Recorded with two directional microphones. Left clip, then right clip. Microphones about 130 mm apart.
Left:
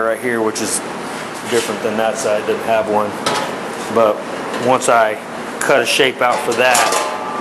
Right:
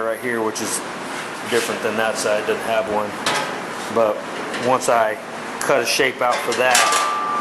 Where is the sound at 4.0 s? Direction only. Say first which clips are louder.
Left 5 dB; 10° left (ahead or behind).